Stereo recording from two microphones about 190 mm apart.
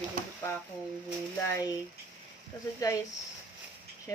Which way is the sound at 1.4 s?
15° left (ahead or behind).